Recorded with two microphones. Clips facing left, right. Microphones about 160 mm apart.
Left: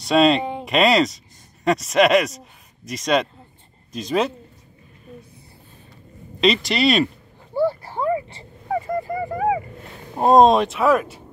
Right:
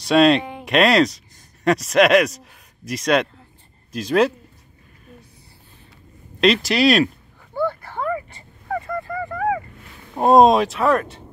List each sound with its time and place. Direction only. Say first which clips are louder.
0.0 s speech: right 1 dB; centre (ahead or behind)
6.4 s speech: right 2 dB; centre (ahead or behind)
7.5 s a sound: left 3 dB; 10° left (ahead or behind)
8.6 s honk: left 3 dB; 20° left (ahead or behind)
10.1 s speech: even; 5° right (ahead or behind)